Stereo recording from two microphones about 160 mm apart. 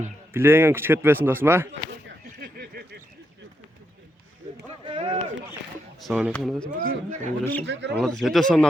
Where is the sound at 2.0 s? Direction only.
75° right (ahead or behind).